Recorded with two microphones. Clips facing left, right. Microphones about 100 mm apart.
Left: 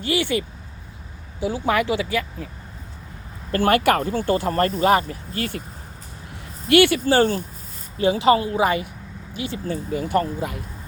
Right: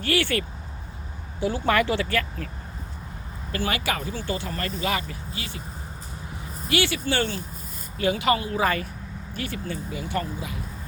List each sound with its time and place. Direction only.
0.0 s speech: 20° left (ahead or behind)
1.4 s speech: 5° left (ahead or behind)
3.5 s speech: 55° left (ahead or behind)
6.7 s speech: 55° left (ahead or behind); by 7.4 s 40° left (ahead or behind)
7.9 s a woman's voice: 30° left (ahead or behind)
8.6 s speech: 15° left (ahead or behind)
9.6 s speech: 40° left (ahead or behind)